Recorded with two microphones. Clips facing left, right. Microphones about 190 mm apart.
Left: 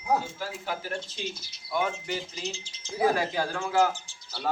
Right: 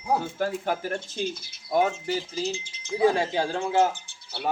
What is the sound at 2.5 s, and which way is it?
Speech, 55° right (ahead or behind).